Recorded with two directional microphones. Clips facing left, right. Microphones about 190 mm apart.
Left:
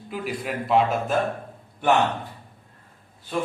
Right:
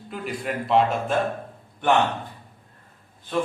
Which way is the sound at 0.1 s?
Centre (ahead or behind).